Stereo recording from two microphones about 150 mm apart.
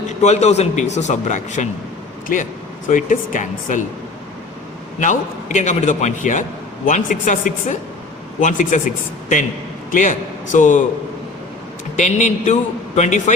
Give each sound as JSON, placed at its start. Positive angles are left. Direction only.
{"t": 0.2, "sound": "a man's voice", "side_deg": 50}
{"t": 4.9, "sound": "a man's voice", "side_deg": 55}
{"t": 9.9, "sound": "speech", "side_deg": 55}
{"t": 11.9, "sound": "a man's voice", "side_deg": 50}